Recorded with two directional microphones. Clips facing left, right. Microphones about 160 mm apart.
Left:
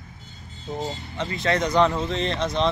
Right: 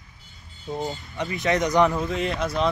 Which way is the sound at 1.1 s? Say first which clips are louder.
Even; 15° right (ahead or behind).